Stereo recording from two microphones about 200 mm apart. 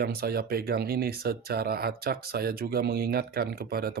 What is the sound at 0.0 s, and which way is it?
Speech, 50° right (ahead or behind).